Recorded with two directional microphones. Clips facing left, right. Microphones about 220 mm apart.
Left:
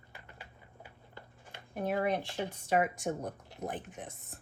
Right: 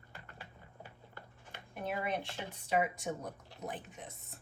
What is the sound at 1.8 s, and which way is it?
Speech, 40° left (ahead or behind).